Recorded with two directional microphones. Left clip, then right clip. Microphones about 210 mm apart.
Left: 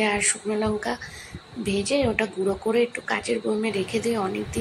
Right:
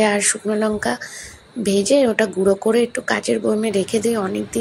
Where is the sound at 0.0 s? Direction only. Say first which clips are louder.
Right 6 dB; 20° right (ahead or behind).